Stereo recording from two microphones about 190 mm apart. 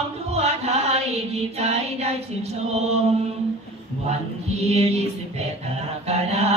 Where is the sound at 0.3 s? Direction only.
35° right (ahead or behind).